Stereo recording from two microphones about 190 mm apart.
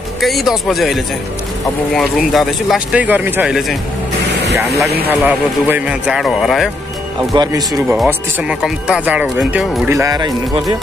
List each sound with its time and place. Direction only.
0.2 s speech: centre (ahead or behind)
5.2 s speech: 10° right (ahead or behind)
7.3 s speech: 20° right (ahead or behind)
7.9 s speech: 10° right (ahead or behind)